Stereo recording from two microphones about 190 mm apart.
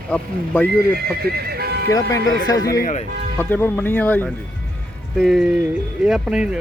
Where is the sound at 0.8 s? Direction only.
55° right (ahead or behind).